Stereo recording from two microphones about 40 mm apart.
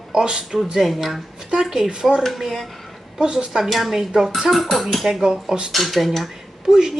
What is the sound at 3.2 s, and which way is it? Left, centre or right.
Speech, centre.